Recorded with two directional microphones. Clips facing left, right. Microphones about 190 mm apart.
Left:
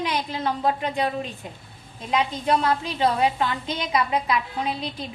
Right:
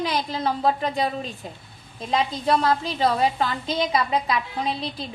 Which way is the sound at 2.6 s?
35° right (ahead or behind).